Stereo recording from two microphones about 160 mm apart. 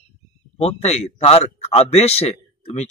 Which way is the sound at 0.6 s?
40° left (ahead or behind).